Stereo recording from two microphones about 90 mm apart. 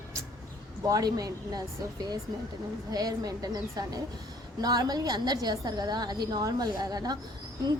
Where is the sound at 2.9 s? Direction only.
45° right (ahead or behind).